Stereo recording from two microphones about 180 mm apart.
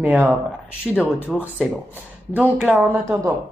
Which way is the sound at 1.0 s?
10° left (ahead or behind).